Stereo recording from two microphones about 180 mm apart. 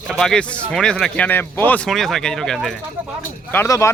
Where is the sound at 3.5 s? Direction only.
15° left (ahead or behind).